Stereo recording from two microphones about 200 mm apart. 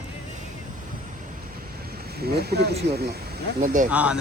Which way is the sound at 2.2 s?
55° right (ahead or behind).